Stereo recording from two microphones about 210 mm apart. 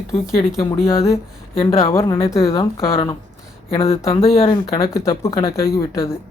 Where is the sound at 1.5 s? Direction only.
25° left (ahead or behind).